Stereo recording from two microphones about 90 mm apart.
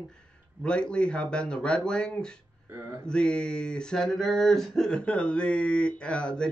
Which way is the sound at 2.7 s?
25° right (ahead or behind).